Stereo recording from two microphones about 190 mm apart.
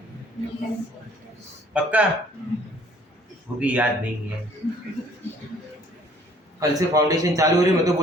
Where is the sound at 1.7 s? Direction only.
5° right (ahead or behind).